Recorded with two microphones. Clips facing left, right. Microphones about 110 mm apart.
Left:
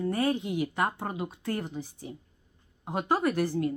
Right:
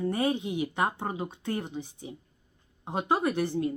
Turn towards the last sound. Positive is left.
turn(degrees=-20)  # may be behind; listen again after turning